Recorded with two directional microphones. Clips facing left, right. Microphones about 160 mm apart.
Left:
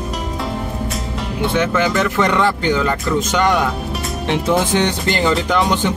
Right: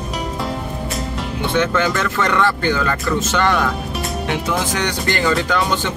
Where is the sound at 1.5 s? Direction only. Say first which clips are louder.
Even; 10° left (ahead or behind).